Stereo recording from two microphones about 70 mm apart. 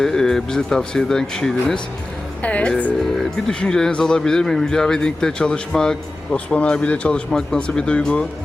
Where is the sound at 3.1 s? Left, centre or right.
Centre.